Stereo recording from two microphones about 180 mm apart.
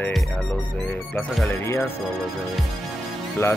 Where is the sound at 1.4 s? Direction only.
15° left (ahead or behind).